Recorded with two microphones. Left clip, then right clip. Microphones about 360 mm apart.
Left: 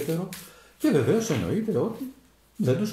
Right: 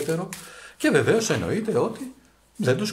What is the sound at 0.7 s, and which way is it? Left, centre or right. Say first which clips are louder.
Speech: right 3 dB; right.